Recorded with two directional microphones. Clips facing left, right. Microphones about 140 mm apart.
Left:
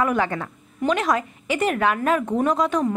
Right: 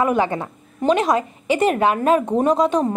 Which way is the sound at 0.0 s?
25° right (ahead or behind).